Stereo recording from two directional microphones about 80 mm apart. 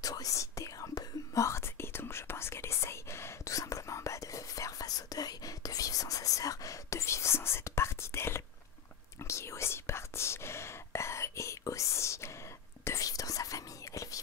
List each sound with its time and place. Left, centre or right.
0.0 s whispering: left